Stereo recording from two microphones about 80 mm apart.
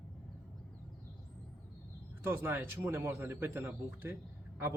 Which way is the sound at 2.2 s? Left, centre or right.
Right.